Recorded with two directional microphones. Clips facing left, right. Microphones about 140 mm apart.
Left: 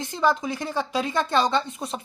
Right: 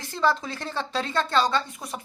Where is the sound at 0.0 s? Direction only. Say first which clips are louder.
Left 2 dB; 15° left (ahead or behind).